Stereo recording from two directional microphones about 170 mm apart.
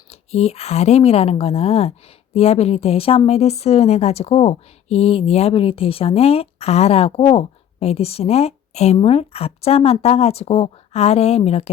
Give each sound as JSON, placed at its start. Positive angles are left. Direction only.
{"t": 0.1, "sound": "speech", "side_deg": 35}